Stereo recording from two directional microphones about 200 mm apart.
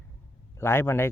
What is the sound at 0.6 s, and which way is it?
Speech, 10° left (ahead or behind).